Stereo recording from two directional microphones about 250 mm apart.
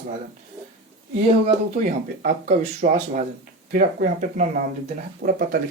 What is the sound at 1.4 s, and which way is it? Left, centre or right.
Speech, right.